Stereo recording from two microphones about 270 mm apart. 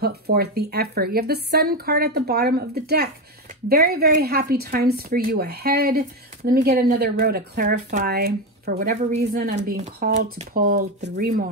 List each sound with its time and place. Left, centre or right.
0.0 s a woman's voice: right
10.7 s a woman's voice: right